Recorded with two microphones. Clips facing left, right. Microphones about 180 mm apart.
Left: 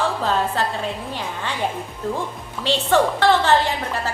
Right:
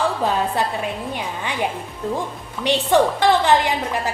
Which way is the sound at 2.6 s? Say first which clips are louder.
Right 2 dB; 15° right (ahead or behind).